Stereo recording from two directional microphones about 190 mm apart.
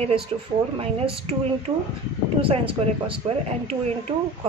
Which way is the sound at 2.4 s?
30° right (ahead or behind).